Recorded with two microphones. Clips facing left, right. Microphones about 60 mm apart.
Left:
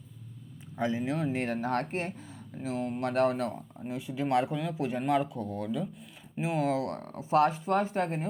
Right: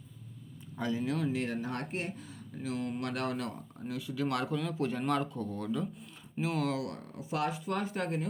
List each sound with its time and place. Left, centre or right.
0.8 s speech: left
1.3 s speech: left
2.6 s speech: left; by 5.9 s centre
6.4 s speech: left